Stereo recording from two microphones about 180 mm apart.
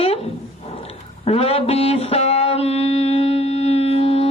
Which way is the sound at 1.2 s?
35° left (ahead or behind).